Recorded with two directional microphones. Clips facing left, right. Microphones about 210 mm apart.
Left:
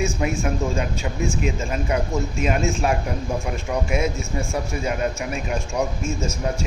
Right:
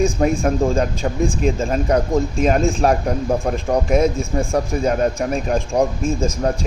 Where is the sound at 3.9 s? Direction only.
50° right (ahead or behind).